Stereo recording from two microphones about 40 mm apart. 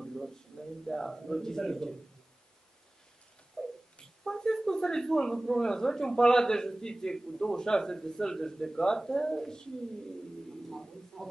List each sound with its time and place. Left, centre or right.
0.8 s a man's voice: centre
3.6 s a sound: centre
5.4 s a man's voice: centre
11.2 s a man's voice: centre